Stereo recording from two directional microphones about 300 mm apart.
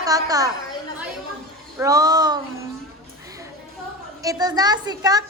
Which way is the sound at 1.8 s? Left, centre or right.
Centre.